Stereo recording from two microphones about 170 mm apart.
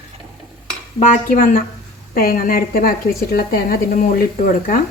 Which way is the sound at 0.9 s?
45° left (ahead or behind).